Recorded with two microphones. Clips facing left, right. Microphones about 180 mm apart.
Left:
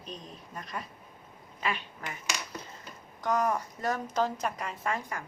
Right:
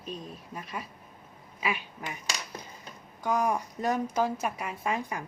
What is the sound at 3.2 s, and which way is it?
A woman's voice, 10° right (ahead or behind).